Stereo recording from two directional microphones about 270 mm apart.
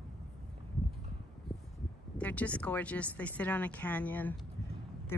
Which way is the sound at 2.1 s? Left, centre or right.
Centre.